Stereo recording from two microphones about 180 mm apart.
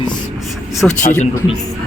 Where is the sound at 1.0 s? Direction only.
45° left (ahead or behind).